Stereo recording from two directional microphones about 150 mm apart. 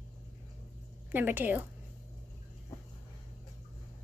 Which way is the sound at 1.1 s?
15° right (ahead or behind).